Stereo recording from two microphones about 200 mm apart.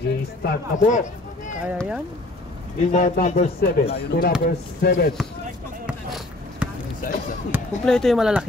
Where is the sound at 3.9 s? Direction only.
55° left (ahead or behind).